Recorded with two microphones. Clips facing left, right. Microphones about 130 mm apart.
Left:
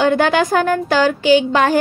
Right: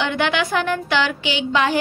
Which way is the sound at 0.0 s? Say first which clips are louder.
Left 7 dB; 40° left (ahead or behind).